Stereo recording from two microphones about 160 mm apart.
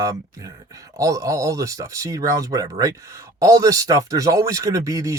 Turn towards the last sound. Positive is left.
turn(degrees=-20)  # may be behind; listen again after turning